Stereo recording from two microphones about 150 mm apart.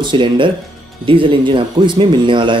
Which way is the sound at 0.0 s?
30° right (ahead or behind).